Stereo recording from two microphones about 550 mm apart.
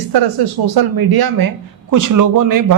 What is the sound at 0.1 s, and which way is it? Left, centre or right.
Speech, right.